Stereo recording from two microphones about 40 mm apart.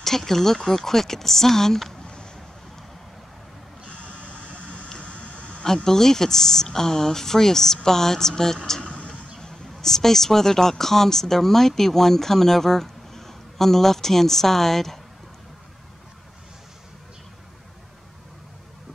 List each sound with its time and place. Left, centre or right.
0.0 s speech: centre
3.8 s a sound: left
4.2 s vehicle: left
4.8 s a sound: left
5.9 s speech: centre
8.8 s vehicle: left
9.4 s speech: centre